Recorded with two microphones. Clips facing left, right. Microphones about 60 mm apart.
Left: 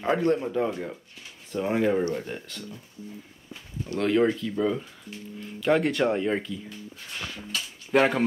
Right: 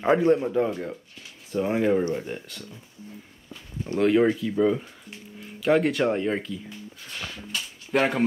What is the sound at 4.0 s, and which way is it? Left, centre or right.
Speech, centre.